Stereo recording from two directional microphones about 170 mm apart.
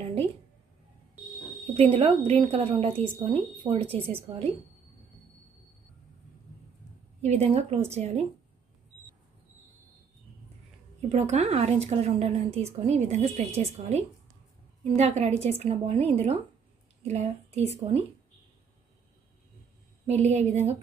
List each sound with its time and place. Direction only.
1.8 s a woman's voice: 35° right (ahead or behind)
7.2 s a woman's voice: 40° right (ahead or behind)
11.0 s a woman's voice: 40° right (ahead or behind)
20.1 s a woman's voice: 40° right (ahead or behind)